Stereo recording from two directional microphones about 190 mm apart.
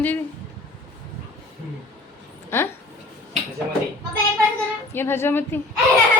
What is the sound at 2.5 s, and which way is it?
Speech, 15° left (ahead or behind).